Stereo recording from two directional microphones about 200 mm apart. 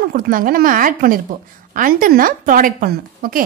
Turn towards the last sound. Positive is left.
turn(degrees=-45)  # may be behind; listen again after turning